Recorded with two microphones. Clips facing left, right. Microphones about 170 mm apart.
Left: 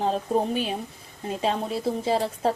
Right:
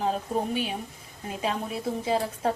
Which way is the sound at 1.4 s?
30° left (ahead or behind).